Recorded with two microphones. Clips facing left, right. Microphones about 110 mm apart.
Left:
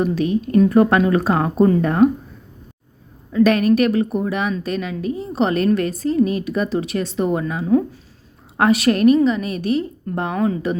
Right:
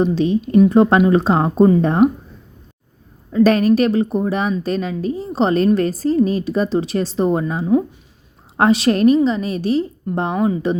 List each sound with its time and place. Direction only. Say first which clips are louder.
0.0 s speech: right 2 dB; 30° right (ahead or behind)
2.0 s speech: left 1 dB; 15° right (ahead or behind)
3.3 s a woman's voice: right 1 dB; 35° right (ahead or behind)
7.6 s speech: left 1 dB; 15° right (ahead or behind)
8.5 s a woman's voice: right 1 dB; 30° right (ahead or behind)
10.3 s speech: right 1 dB; 15° right (ahead or behind)